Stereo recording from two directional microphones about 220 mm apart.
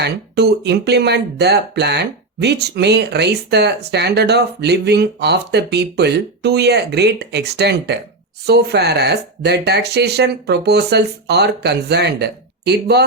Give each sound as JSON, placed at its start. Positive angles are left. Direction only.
{"t": 0.0, "sound": "speech", "side_deg": -50}